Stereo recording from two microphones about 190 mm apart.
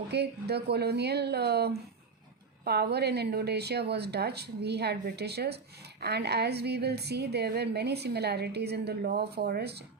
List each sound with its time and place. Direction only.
0.1 s a woman's voice: 60° right (ahead or behind)